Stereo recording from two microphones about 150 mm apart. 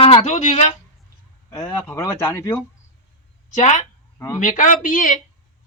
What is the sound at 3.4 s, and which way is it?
Speech, 50° left (ahead or behind).